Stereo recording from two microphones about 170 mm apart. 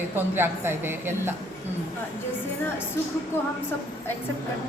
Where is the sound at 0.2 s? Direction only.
10° right (ahead or behind).